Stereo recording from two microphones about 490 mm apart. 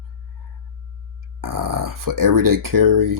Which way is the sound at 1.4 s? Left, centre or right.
Right.